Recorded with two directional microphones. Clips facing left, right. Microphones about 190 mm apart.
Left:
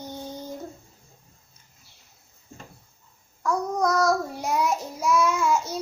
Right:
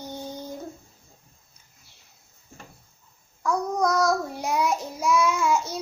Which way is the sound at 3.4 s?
5° left (ahead or behind).